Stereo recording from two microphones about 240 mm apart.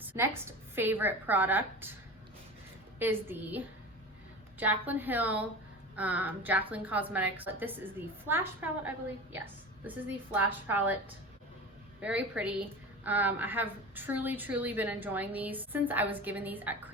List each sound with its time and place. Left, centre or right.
0.0 s a sound: centre
0.8 s a woman's voice: centre
3.0 s a woman's voice: centre
4.6 s a woman's voice: centre
11.9 s a woman's voice: centre